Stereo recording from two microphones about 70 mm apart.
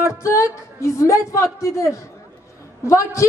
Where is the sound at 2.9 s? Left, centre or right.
Left.